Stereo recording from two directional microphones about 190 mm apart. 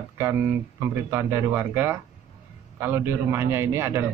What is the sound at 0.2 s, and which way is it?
A man's voice, 15° right (ahead or behind).